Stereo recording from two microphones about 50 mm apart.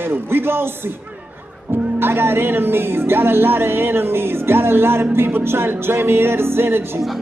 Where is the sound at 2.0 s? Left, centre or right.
Right.